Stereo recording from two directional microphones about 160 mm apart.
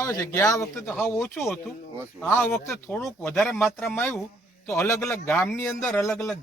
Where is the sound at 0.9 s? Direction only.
5° left (ahead or behind).